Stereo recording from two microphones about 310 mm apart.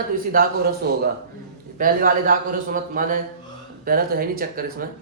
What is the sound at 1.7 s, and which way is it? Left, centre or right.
A man's voice, right.